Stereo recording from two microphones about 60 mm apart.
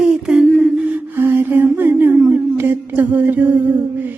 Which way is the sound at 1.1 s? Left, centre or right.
Right.